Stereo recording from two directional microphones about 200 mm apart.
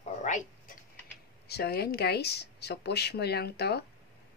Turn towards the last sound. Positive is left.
turn(degrees=55)  # may be behind; listen again after turning